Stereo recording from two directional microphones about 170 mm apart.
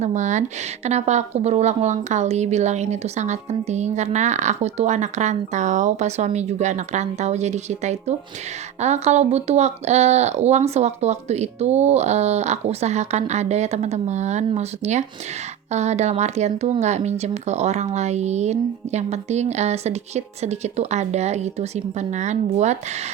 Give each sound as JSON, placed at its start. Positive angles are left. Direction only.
{"t": 0.0, "sound": "a woman's voice", "side_deg": -45}